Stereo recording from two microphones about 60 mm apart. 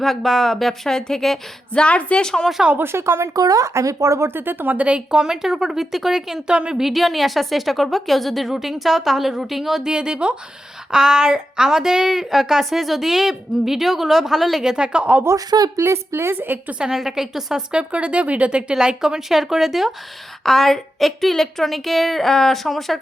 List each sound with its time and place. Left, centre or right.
0.0 s a woman's voice: centre
1.8 s a woman's voice: left
2.2 s speech: centre
2.7 s speech: right
3.3 s speech: right
4.3 s a woman's voice: right; by 15.2 s centre
15.4 s speech: right
15.8 s a woman's voice: right
16.7 s a woman's voice: centre